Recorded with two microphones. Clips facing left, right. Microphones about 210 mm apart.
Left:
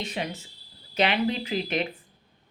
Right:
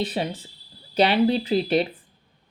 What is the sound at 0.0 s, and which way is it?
A woman's voice, 35° right (ahead or behind).